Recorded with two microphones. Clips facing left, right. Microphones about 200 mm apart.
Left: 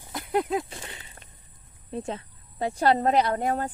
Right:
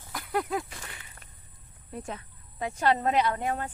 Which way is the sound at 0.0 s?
25° left (ahead or behind).